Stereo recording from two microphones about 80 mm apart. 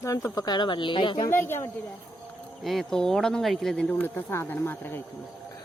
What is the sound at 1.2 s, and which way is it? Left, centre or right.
Speech, left.